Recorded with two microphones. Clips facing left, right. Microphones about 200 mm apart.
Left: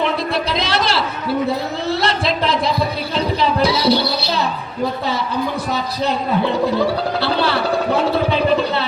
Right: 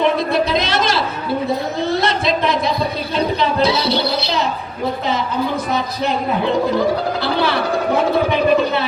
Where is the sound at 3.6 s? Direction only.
25° right (ahead or behind).